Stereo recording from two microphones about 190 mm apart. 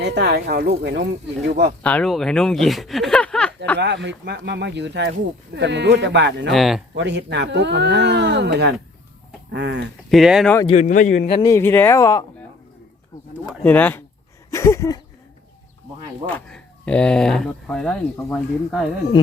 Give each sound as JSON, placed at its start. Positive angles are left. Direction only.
{"t": 0.0, "sound": "speech", "side_deg": -65}
{"t": 1.8, "sound": "speech", "side_deg": 5}
{"t": 3.8, "sound": "speech", "side_deg": -65}
{"t": 6.5, "sound": "speech", "side_deg": 0}
{"t": 6.9, "sound": "speech", "side_deg": -70}
{"t": 10.1, "sound": "speech", "side_deg": 0}
{"t": 10.7, "sound": "a man's voice", "side_deg": 40}
{"t": 11.3, "sound": "speech", "side_deg": 25}
{"t": 11.5, "sound": "speech", "side_deg": 10}
{"t": 13.7, "sound": "speech", "side_deg": 10}
{"t": 14.5, "sound": "a sound", "side_deg": 15}
{"t": 16.3, "sound": "speech", "side_deg": 5}